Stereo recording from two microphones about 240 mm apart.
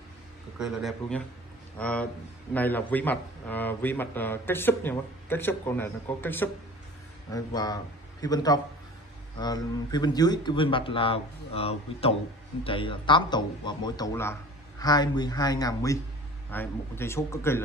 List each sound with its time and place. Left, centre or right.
0.6 s a man's voice: centre